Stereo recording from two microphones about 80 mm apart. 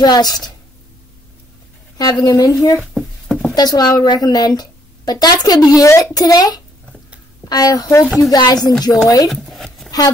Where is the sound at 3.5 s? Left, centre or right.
Left.